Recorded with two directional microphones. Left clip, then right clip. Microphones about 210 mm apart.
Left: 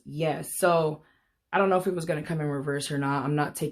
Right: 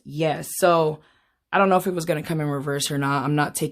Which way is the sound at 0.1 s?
45° right (ahead or behind).